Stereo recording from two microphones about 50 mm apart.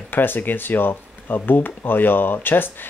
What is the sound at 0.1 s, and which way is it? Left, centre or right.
Speech, left.